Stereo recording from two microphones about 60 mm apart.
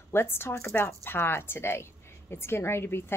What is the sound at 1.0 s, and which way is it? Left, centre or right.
A woman's voice, left.